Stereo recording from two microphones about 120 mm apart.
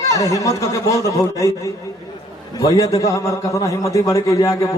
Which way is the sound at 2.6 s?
30° left (ahead or behind).